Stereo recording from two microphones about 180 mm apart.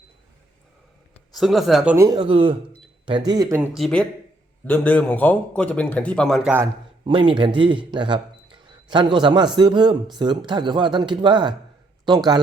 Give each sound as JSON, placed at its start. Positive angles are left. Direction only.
{"t": 1.1, "sound": "speech", "side_deg": 0}
{"t": 2.0, "sound": "speech", "side_deg": -25}
{"t": 3.6, "sound": "a man's voice", "side_deg": 0}
{"t": 7.0, "sound": "speech", "side_deg": -30}